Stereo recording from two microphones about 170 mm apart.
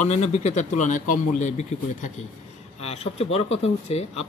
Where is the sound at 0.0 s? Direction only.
40° left (ahead or behind).